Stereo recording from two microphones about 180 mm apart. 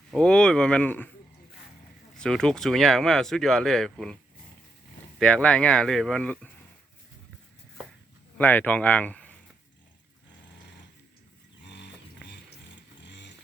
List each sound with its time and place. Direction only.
0.1 s speech: 5° left (ahead or behind)
2.1 s speech: 5° left (ahead or behind)
5.2 s speech: 5° left (ahead or behind)
8.4 s speech: 10° left (ahead or behind)
11.6 s dog: 75° left (ahead or behind)
13.0 s vehicle: 75° left (ahead or behind)